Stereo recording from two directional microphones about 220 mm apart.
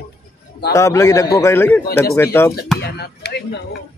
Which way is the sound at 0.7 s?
15° left (ahead or behind).